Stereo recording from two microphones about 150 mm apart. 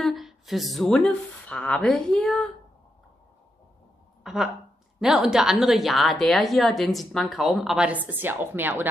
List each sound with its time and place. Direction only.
0.0 s speech: centre (ahead or behind)
4.2 s a sound: centre (ahead or behind)
5.0 s a woman's voice: 5° right (ahead or behind)